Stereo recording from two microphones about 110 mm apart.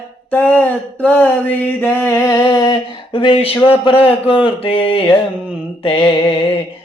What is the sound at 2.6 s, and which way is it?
Speech, 45° left (ahead or behind).